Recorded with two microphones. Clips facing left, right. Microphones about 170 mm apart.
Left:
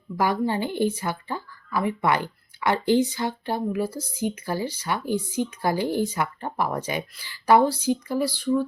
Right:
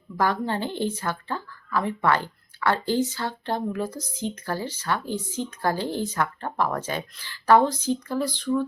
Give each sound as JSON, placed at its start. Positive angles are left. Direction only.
{"t": 0.2, "sound": "speech", "side_deg": 10}